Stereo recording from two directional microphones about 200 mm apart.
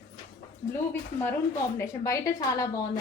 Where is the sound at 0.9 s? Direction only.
10° left (ahead or behind).